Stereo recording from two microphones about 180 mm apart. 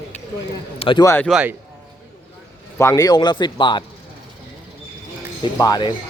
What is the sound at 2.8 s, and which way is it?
A man's voice, 15° left (ahead or behind).